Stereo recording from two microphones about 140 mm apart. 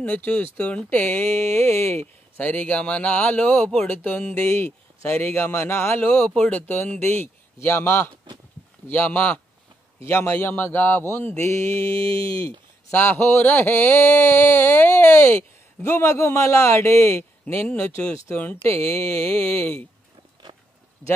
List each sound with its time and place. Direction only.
0.0 s speech: 10° left (ahead or behind)
12.2 s speech: 40° right (ahead or behind)
12.9 s speech: 15° left (ahead or behind)
17.5 s speech: 10° left (ahead or behind)
20.5 s a sound: 30° right (ahead or behind)